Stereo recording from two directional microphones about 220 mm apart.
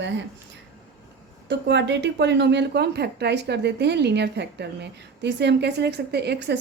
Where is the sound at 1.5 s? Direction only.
50° right (ahead or behind).